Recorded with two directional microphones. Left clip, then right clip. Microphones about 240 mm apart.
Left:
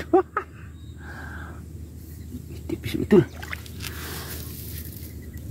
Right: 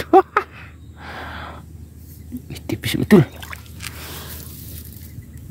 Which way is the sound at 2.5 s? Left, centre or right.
Right.